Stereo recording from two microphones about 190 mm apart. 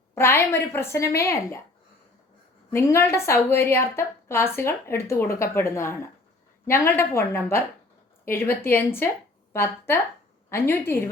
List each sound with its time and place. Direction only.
0.1 s a woman's voice: 15° left (ahead or behind)
2.6 s a woman's voice: 15° left (ahead or behind)